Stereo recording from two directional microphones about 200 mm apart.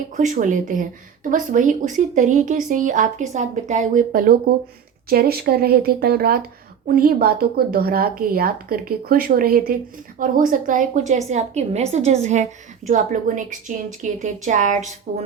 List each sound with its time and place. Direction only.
0.2 s a woman's voice: 40° right (ahead or behind)